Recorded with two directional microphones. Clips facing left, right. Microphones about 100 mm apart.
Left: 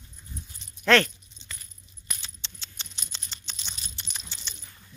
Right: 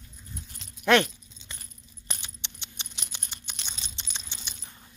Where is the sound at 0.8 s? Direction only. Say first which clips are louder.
Even; 15° right (ahead or behind).